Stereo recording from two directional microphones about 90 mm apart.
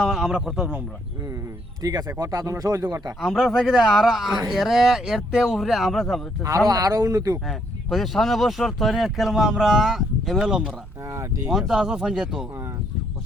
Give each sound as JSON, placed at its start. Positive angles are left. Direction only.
{"t": 0.0, "sound": "speech", "side_deg": -5}
{"t": 1.8, "sound": "speech", "side_deg": -45}
{"t": 3.2, "sound": "speech", "side_deg": 0}
{"t": 6.7, "sound": "speech", "side_deg": -40}
{"t": 7.4, "sound": "speech", "side_deg": 0}
{"t": 11.1, "sound": "speech", "side_deg": -35}
{"t": 11.4, "sound": "speech", "side_deg": -5}